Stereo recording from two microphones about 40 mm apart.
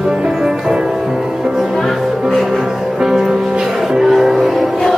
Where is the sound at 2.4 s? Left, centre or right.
Centre.